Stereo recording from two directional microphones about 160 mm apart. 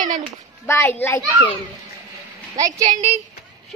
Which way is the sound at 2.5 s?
20° right (ahead or behind).